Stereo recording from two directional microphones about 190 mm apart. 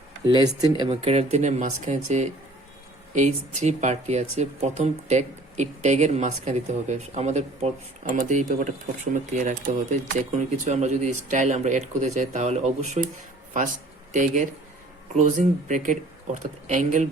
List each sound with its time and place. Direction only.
0.3 s speech: 20° right (ahead or behind)
0.9 s speech: 35° right (ahead or behind)